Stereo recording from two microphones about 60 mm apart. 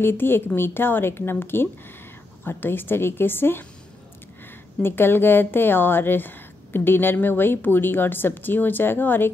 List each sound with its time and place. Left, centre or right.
0.0 s speech: left
4.8 s speech: left